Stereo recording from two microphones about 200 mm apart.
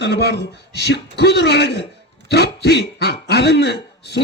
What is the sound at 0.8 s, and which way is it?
A man's voice, 55° left (ahead or behind).